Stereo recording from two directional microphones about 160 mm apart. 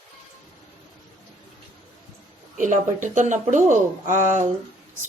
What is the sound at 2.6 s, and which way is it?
A woman's voice, 50° right (ahead or behind).